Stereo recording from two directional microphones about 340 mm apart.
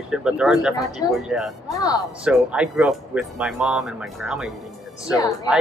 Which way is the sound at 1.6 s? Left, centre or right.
Centre.